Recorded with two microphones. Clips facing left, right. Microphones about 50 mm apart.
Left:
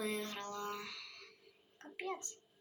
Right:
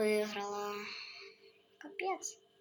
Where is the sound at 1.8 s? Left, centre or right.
Right.